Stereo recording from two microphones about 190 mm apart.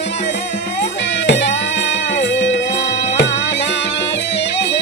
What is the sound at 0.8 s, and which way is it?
Music, 65° left (ahead or behind).